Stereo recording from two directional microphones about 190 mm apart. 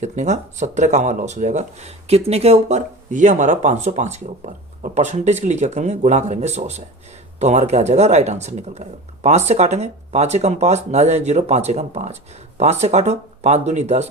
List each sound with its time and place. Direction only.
0.0 s speech: 40° right (ahead or behind)